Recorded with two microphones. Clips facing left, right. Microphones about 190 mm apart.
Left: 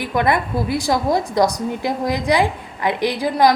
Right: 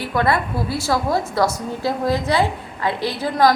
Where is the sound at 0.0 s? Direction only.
15° left (ahead or behind).